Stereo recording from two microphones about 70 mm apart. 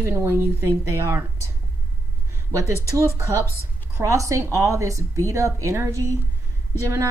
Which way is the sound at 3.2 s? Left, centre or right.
Right.